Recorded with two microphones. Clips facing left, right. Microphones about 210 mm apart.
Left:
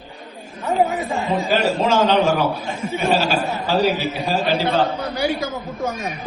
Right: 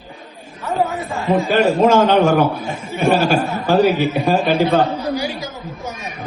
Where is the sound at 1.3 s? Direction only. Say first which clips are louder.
Right 6 dB; 50° right (ahead or behind).